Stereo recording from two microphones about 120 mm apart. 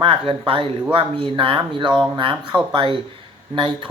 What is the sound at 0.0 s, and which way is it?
Speech, 50° right (ahead or behind).